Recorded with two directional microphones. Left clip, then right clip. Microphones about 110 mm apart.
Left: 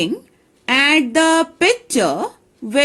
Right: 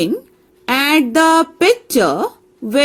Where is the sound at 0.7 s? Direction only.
40° right (ahead or behind).